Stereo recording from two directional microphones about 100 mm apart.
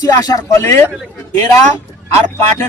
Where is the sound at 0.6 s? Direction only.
25° left (ahead or behind).